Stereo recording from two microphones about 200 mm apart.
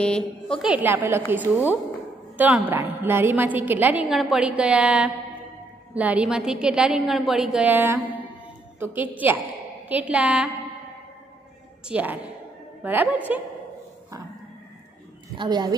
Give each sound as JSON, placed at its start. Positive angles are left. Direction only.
{"t": 0.0, "sound": "a woman's voice", "side_deg": 5}
{"t": 11.9, "sound": "a woman's voice", "side_deg": -10}
{"t": 15.3, "sound": "a woman's voice", "side_deg": -20}